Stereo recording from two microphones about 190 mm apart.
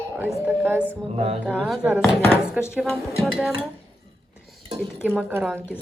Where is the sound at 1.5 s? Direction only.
5° left (ahead or behind).